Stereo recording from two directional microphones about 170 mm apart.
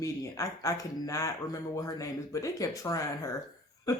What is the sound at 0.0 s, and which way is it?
Speech, 20° left (ahead or behind).